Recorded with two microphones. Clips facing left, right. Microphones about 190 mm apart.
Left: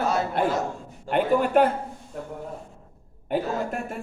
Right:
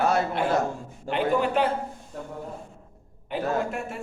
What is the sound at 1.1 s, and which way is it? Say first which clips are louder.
Speech: left 2 dB; 50° left (ahead or behind).